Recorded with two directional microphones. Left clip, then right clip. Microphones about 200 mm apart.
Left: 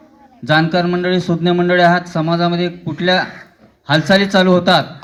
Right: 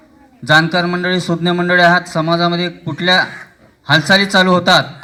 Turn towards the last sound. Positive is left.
turn(degrees=-20)  # may be behind; listen again after turning